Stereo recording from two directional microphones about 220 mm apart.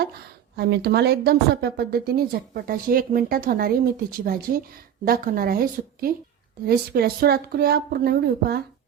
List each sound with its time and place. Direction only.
0.5 s a woman's voice: 50° right (ahead or behind)